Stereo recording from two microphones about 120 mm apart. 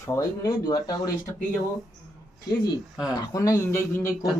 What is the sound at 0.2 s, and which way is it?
Speech, 30° left (ahead or behind).